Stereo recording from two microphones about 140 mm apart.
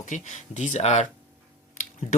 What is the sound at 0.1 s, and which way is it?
Speech, 60° left (ahead or behind).